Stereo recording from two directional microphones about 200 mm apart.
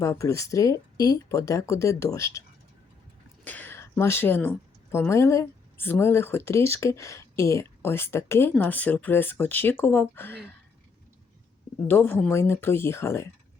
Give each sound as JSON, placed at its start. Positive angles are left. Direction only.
{"t": 0.0, "sound": "a woman's voice", "side_deg": 15}
{"t": 3.4, "sound": "a woman's voice", "side_deg": 10}
{"t": 11.9, "sound": "a woman's voice", "side_deg": 10}